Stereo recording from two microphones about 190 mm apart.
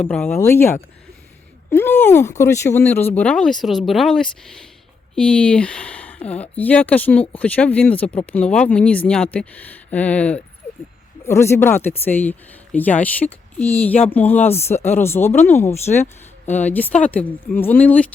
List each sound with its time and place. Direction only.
0.0 s speech: 10° left (ahead or behind)
10.6 s a sound: 10° left (ahead or behind)
11.3 s speech: 15° left (ahead or behind)